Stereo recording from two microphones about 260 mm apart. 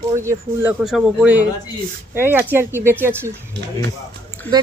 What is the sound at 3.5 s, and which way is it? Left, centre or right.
Speech, right.